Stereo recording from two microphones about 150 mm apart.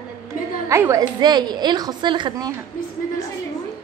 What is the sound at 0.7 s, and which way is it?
A woman's voice, 20° right (ahead or behind).